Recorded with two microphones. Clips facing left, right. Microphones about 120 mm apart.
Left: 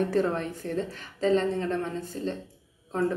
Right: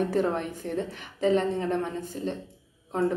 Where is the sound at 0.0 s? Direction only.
15° right (ahead or behind).